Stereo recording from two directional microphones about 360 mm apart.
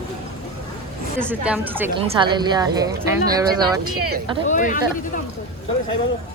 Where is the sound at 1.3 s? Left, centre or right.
Centre.